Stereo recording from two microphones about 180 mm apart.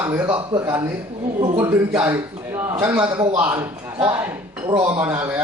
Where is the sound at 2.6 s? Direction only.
15° right (ahead or behind).